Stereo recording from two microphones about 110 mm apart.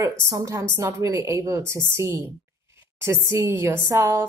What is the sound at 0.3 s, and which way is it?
A woman's voice, 30° right (ahead or behind).